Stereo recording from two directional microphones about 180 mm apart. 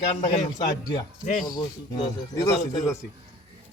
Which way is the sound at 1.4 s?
25° left (ahead or behind).